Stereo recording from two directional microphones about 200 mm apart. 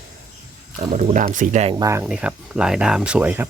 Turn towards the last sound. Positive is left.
turn(degrees=-10)  # may be behind; listen again after turning